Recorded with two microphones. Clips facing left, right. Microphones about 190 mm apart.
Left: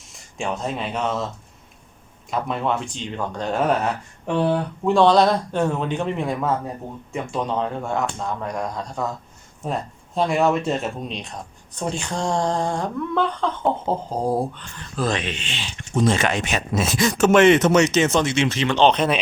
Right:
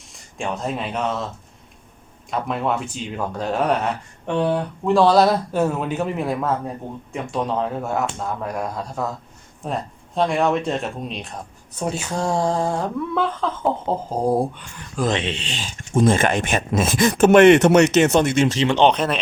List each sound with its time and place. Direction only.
0.0 s speech: centre (ahead or behind)
2.3 s speech: centre (ahead or behind)
4.9 s speech: 5° right (ahead or behind)
14.2 s speech: 15° right (ahead or behind); by 18.6 s 45° right (ahead or behind)
18.6 s speech: 15° right (ahead or behind)